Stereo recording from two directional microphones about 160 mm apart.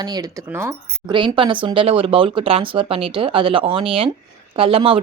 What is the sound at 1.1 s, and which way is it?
Speech, 30° right (ahead or behind).